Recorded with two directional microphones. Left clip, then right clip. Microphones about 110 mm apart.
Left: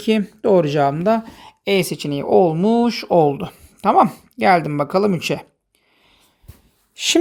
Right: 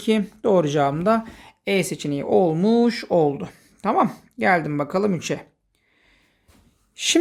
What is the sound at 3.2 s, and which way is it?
Speech, 45° left (ahead or behind).